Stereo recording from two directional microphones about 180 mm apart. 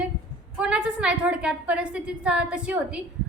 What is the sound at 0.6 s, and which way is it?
A woman's voice, 5° right (ahead or behind).